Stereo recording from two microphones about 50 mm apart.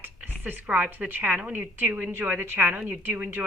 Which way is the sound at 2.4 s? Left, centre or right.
Right.